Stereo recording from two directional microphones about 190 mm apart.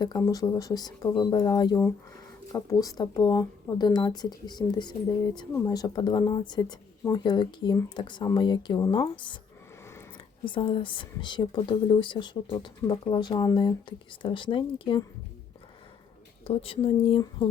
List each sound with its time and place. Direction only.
0.0 s speech: 20° left (ahead or behind)
16.4 s speech: 30° left (ahead or behind)